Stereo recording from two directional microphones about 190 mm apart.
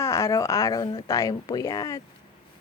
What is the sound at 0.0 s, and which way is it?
Speech, 15° left (ahead or behind).